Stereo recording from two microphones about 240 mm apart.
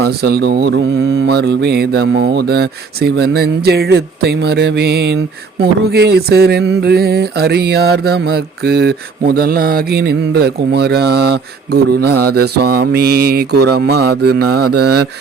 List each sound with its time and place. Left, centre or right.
0.0 s mantra: right